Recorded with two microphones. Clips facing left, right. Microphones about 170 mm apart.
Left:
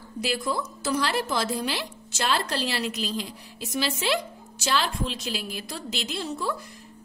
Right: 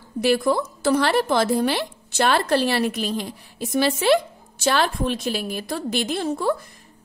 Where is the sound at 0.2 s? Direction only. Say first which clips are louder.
Right 9 dB; 60° right (ahead or behind).